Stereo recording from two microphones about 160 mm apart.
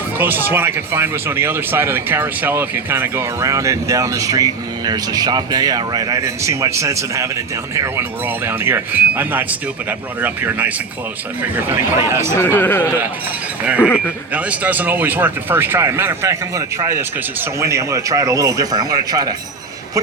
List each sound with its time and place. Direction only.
0.2 s a man's voice: 10° right (ahead or behind)
8.4 s speech: 15° right (ahead or behind)
12.4 s a man's voice: 15° left (ahead or behind)
13.7 s speech: 5° right (ahead or behind); by 19.3 s 25° right (ahead or behind)